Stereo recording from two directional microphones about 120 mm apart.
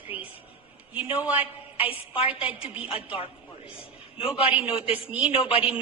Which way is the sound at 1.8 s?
50° left (ahead or behind).